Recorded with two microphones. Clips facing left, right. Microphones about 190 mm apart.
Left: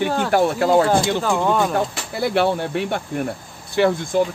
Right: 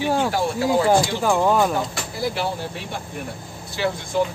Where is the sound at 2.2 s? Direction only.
65° left (ahead or behind).